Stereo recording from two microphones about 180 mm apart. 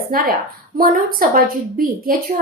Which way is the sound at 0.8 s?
50° right (ahead or behind).